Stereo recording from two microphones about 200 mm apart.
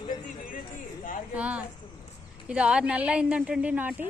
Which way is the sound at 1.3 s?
5° right (ahead or behind).